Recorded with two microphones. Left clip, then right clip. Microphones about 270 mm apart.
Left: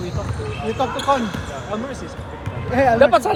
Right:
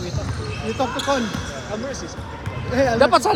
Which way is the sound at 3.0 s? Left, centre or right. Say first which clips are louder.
Even; right.